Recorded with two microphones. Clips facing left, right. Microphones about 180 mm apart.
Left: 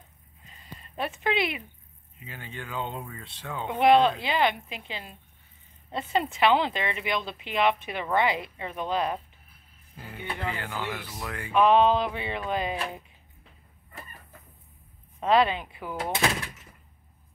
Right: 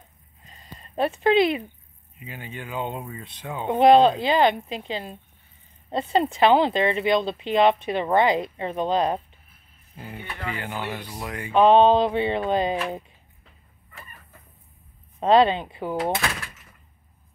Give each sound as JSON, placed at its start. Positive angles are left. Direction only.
{"t": 0.5, "sound": "a sound", "side_deg": -35}
{"t": 2.1, "sound": "speech", "side_deg": -15}
{"t": 3.6, "sound": "speech", "side_deg": -30}
{"t": 10.5, "sound": "speech", "side_deg": -20}
{"t": 11.5, "sound": "speech", "side_deg": -30}
{"t": 15.1, "sound": "speech", "side_deg": -30}